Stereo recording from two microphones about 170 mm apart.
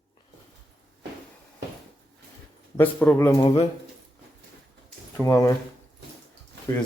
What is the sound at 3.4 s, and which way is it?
Speech, 35° left (ahead or behind).